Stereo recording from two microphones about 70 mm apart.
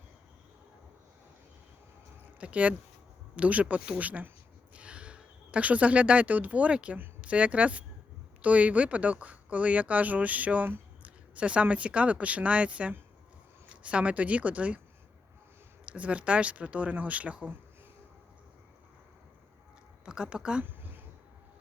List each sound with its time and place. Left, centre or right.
2.4 s speech: centre
15.9 s speech: centre
20.1 s speech: centre